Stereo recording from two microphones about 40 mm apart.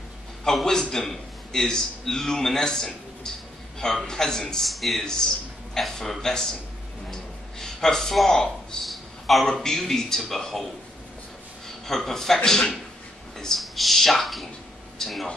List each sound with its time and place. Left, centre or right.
0.5 s a man's voice: centre
4.6 s speech: centre
5.0 s a man's voice: centre
7.1 s a sound: centre
9.5 s a man's voice: centre
13.6 s speech: centre
15.0 s speech: centre